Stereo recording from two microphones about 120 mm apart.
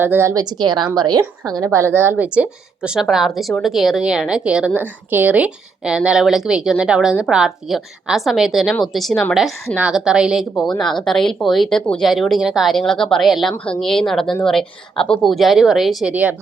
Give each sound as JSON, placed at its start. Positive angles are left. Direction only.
{"t": 0.0, "sound": "a woman's voice", "side_deg": -20}
{"t": 0.6, "sound": "a woman's voice", "side_deg": -35}